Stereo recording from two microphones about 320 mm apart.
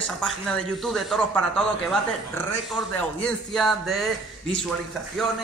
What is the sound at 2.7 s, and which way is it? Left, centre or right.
A man's voice, centre.